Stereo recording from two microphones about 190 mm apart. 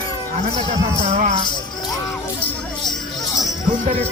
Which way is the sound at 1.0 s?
40° right (ahead or behind).